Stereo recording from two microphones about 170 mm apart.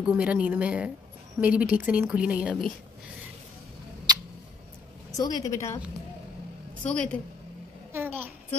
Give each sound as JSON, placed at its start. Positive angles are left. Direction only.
{"t": 0.1, "sound": "a woman's voice", "side_deg": -10}
{"t": 5.1, "sound": "a woman's voice", "side_deg": 20}
{"t": 6.8, "sound": "speech", "side_deg": 5}
{"t": 7.9, "sound": "a sound", "side_deg": -10}